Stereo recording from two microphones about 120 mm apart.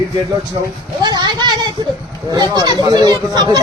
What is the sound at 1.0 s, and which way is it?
Speech, 35° right (ahead or behind).